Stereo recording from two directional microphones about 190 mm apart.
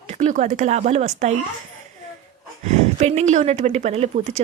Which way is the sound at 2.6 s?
35° right (ahead or behind).